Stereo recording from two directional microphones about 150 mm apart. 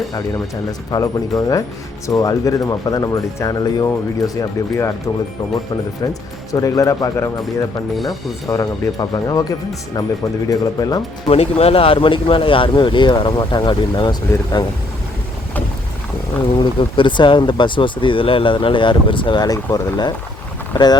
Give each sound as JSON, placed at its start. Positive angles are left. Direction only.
{"t": 0.9, "sound": "speech", "side_deg": 25}
{"t": 6.5, "sound": "speech", "side_deg": 20}
{"t": 8.4, "sound": "speech", "side_deg": 20}
{"t": 11.3, "sound": "speech", "side_deg": 45}
{"t": 16.6, "sound": "speech", "side_deg": 35}